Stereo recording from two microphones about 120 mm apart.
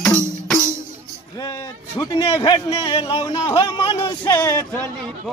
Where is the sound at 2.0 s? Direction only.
30° left (ahead or behind).